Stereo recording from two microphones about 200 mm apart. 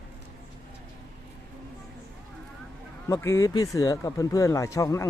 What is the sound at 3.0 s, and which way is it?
Speech, 15° left (ahead or behind).